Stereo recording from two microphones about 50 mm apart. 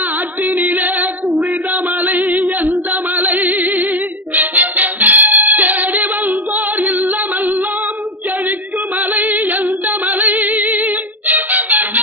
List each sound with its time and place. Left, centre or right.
0.4 s singing: right
2.0 s music: right
9.1 s a capella: right
10.5 s music: right